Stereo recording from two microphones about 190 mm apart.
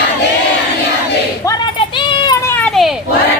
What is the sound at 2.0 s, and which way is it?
Baby cry, 25° left (ahead or behind).